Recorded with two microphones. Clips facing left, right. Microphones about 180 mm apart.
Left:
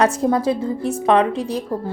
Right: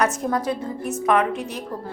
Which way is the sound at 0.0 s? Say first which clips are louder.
Left 5 dB; 30° left (ahead or behind).